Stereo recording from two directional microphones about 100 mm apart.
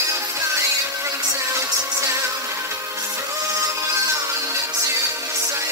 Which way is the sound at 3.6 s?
30° right (ahead or behind).